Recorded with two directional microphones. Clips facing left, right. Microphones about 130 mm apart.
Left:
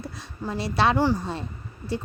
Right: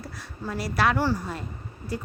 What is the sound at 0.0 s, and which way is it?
A woman's voice, 25° left (ahead or behind).